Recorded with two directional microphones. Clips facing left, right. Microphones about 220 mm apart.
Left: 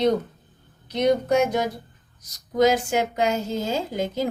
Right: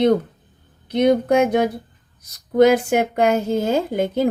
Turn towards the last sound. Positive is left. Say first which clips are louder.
# right 6 dB
turn(degrees=-55)  # may be behind; listen again after turning